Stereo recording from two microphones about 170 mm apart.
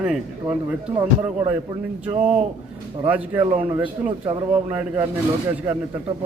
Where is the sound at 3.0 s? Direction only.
10° right (ahead or behind).